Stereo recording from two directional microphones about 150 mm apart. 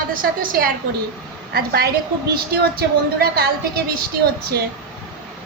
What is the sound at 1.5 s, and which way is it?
Speech, 90° right.